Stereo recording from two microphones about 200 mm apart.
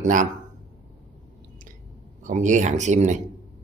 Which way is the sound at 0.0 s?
40° right (ahead or behind).